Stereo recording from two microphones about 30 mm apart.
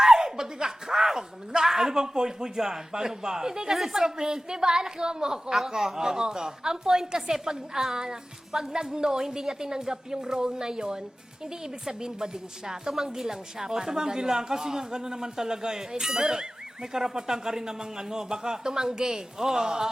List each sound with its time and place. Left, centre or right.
0.0 s a woman's voice: centre